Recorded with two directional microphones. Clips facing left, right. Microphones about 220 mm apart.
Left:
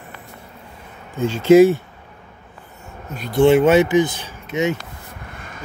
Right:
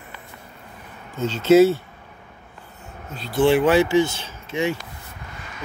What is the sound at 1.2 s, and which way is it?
Speech, 10° left (ahead or behind).